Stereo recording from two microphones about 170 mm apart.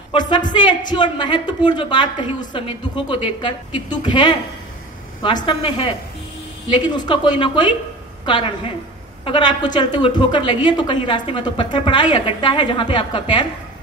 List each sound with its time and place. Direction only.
0.1 s a sound: 25° left (ahead or behind)
0.5 s a woman's voice: 25° left (ahead or behind)
7.1 s a woman's voice: 25° left (ahead or behind)